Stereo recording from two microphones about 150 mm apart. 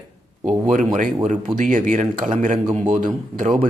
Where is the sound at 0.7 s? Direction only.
60° right (ahead or behind).